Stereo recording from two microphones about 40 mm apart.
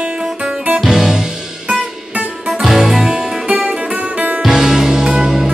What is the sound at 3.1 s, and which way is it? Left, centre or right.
Music, right.